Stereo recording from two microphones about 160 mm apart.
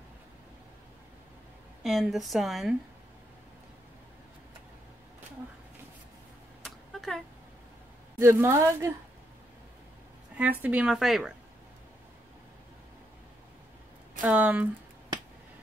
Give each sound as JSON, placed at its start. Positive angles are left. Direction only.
{"t": 1.8, "sound": "a woman's voice", "side_deg": 0}
{"t": 6.6, "sound": "a sound", "side_deg": 0}
{"t": 8.2, "sound": "a woman's voice", "side_deg": -15}
{"t": 10.3, "sound": "a woman's voice", "side_deg": -10}
{"t": 14.2, "sound": "a woman's voice", "side_deg": -10}